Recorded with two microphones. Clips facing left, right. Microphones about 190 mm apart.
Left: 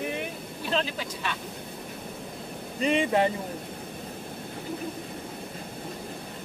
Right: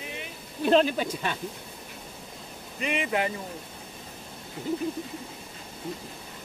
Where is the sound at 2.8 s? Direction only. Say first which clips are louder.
Left 5 dB; 30° left (ahead or behind).